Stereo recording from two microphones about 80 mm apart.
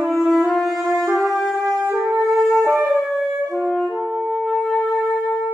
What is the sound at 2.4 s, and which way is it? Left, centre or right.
Wind instrument, centre.